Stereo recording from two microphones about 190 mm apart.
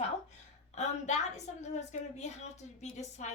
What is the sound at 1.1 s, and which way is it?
A woman's voice, 40° left (ahead or behind).